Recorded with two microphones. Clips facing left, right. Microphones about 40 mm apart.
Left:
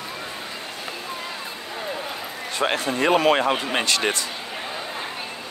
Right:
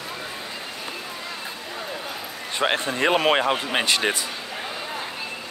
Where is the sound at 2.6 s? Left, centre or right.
Right.